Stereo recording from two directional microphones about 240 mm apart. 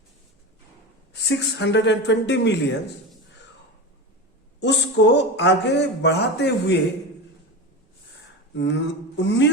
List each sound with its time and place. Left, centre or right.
1.3 s speech: left
4.6 s speech: left
8.5 s speech: left